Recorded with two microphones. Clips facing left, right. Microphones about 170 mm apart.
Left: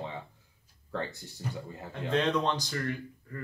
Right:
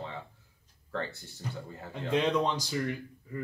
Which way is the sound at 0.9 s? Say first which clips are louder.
Even; 15° left (ahead or behind).